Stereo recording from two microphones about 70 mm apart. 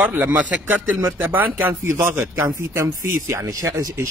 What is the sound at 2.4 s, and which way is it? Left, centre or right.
Speech, right.